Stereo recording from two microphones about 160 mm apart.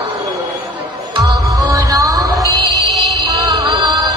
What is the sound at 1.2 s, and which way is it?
Music, 25° right (ahead or behind).